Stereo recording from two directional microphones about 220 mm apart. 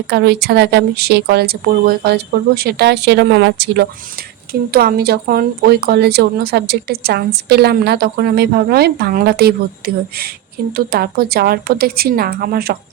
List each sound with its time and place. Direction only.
0.1 s speech: 50° right (ahead or behind)